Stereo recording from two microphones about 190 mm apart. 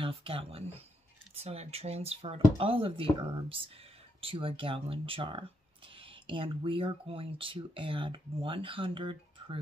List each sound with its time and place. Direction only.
0.0 s speech: 30° right (ahead or behind)